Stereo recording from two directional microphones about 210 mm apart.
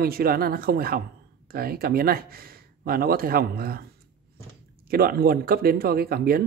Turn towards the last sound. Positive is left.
turn(degrees=-45)  # may be behind; listen again after turning